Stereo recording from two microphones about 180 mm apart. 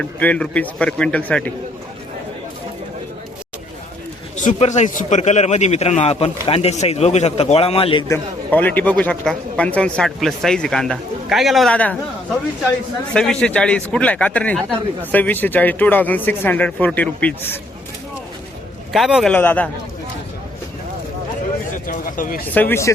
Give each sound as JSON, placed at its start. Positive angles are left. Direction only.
{"t": 0.0, "sound": "a man's voice", "side_deg": 5}
{"t": 4.4, "sound": "a man's voice", "side_deg": 40}
{"t": 8.0, "sound": "a man's voice", "side_deg": 10}
{"t": 13.1, "sound": "a man's voice", "side_deg": 5}
{"t": 18.9, "sound": "a man's voice", "side_deg": 0}
{"t": 21.7, "sound": "a sound", "side_deg": 50}
{"t": 22.4, "sound": "a man's voice", "side_deg": 10}